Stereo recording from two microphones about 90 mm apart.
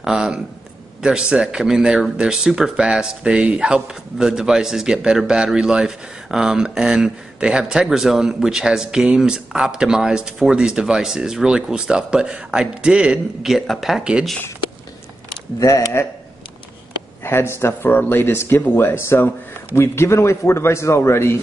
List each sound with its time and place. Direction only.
0.0 s speech: 5° right (ahead or behind)
15.6 s speech: 30° left (ahead or behind)
17.2 s a man's voice: 25° left (ahead or behind)